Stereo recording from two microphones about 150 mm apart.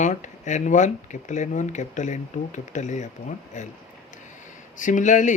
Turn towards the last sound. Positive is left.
turn(degrees=55)  # may be behind; listen again after turning